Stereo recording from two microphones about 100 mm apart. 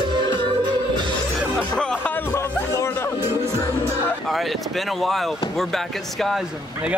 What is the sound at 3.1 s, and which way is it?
Music, 20° right (ahead or behind).